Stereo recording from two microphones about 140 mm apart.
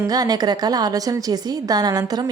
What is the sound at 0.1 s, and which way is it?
A woman's voice, 25° right (ahead or behind).